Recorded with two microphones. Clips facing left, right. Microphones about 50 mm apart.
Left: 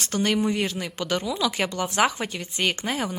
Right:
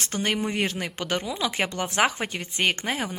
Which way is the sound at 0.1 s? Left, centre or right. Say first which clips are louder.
Left 4 dB; centre.